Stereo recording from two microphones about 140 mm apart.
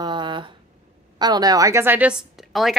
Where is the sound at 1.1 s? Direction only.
30° right (ahead or behind); by 2.7 s centre (ahead or behind).